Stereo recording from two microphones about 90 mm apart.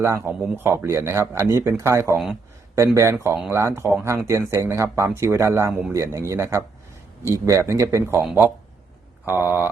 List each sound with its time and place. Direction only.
0.0 s speech: 30° right (ahead or behind)
2.1 s speech: 5° right (ahead or behind)
2.7 s speech: 35° right (ahead or behind)